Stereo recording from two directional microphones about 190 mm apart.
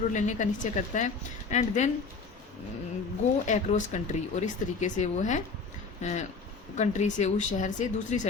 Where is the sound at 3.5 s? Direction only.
40° left (ahead or behind).